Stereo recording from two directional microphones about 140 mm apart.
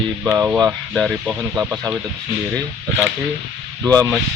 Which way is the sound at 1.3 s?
10° right (ahead or behind).